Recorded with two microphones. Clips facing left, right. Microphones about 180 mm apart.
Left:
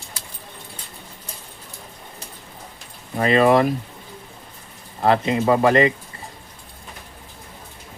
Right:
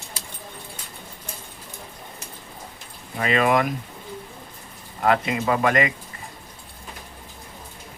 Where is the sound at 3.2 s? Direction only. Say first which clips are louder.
Left 5 dB; 35° left (ahead or behind).